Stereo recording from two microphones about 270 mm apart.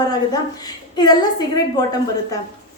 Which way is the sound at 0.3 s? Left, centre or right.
Centre.